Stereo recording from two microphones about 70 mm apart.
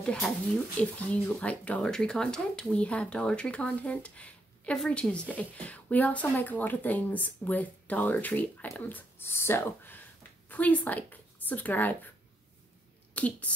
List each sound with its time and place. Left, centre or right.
0.0 s speech: centre
4.7 s speech: centre; by 9.9 s left
10.5 s speech: left
13.1 s speech: centre